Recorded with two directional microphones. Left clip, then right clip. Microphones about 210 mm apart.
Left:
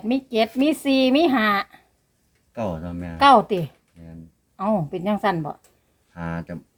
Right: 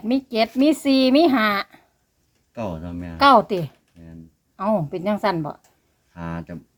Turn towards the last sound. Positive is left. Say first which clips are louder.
# left 1 dB
turn(degrees=5)  # may be behind; listen again after turning